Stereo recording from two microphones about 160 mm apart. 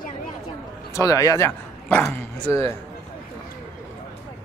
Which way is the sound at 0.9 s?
20° left (ahead or behind).